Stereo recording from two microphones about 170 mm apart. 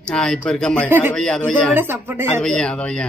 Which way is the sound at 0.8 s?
10° right (ahead or behind).